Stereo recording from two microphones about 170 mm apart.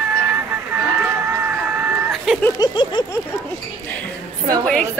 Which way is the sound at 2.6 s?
25° left (ahead or behind).